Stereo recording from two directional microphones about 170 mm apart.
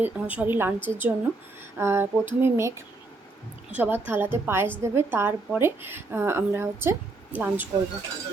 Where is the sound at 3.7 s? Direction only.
10° right (ahead or behind).